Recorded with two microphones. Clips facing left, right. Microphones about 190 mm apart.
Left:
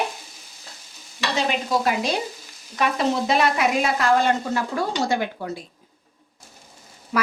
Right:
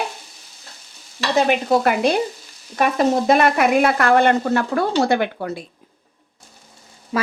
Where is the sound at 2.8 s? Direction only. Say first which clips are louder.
Right 5 dB; 45° right (ahead or behind); by 5.5 s 65° right (ahead or behind).